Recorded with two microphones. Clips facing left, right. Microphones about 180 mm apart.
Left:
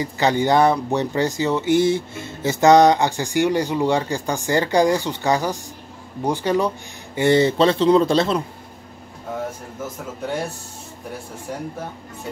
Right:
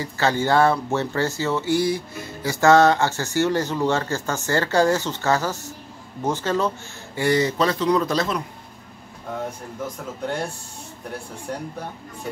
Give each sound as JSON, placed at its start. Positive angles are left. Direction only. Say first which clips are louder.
{"t": 0.0, "sound": "speech", "louder": "left 3 dB", "side_deg": 15}
{"t": 7.2, "sound": "a man's voice", "louder": "left 4 dB", "side_deg": 25}
{"t": 10.2, "sound": "speech", "louder": "left 1 dB", "side_deg": 5}